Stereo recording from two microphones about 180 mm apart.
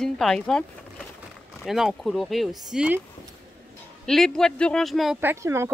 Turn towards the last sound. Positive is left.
turn(degrees=-15)  # may be behind; listen again after turning